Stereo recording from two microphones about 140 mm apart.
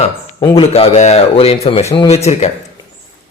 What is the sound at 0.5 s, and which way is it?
Speech, 45° left (ahead or behind).